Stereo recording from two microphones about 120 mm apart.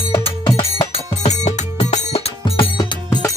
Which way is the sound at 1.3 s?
70° left (ahead or behind).